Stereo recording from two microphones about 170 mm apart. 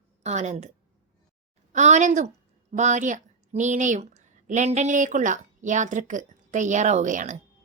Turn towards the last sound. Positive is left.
turn(degrees=-45)  # may be behind; listen again after turning